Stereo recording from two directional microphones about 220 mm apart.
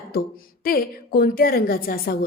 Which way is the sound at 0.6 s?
40° left (ahead or behind).